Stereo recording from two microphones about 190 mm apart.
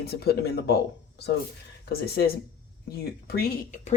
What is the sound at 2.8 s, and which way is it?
Speech, 55° left (ahead or behind).